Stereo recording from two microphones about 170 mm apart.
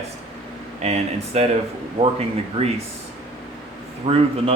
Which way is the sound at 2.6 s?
40° right (ahead or behind).